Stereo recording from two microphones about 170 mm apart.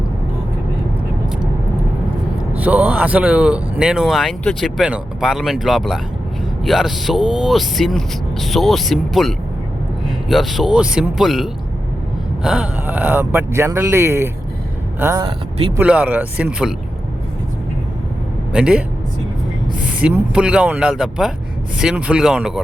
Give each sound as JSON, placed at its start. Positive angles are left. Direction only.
{"t": 2.6, "sound": "speech", "side_deg": -10}
{"t": 15.2, "sound": "speech", "side_deg": -35}
{"t": 15.8, "sound": "speech", "side_deg": -10}
{"t": 18.5, "sound": "speech", "side_deg": -5}
{"t": 20.0, "sound": "speech", "side_deg": -5}